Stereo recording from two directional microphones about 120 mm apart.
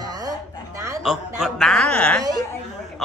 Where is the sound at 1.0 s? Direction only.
Centre (ahead or behind).